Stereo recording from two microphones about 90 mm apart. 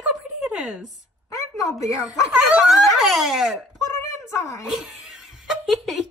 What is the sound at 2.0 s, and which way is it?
A child's voice, 10° right (ahead or behind).